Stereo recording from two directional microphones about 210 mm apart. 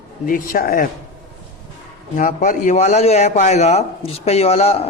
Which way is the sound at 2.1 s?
40° left (ahead or behind).